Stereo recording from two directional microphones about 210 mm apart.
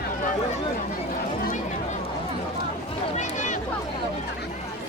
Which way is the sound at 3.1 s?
35° left (ahead or behind).